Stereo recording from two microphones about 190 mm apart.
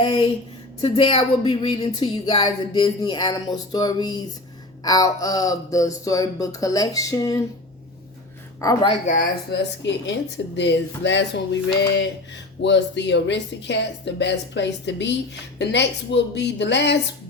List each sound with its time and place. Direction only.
0.0 s a woman's voice: 25° left (ahead or behind)
8.6 s a woman's voice: 25° left (ahead or behind)
9.5 s a woman's voice: 65° left (ahead or behind)